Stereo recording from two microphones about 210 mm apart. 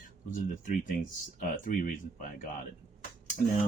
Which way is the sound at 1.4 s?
40° left (ahead or behind).